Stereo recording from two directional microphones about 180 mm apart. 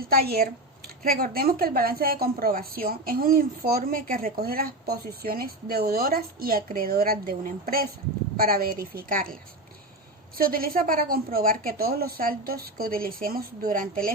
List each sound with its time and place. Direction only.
0.0 s a woman's voice: 55° right (ahead or behind)